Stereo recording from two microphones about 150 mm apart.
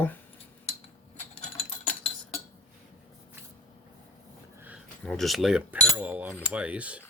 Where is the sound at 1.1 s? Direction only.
45° left (ahead or behind).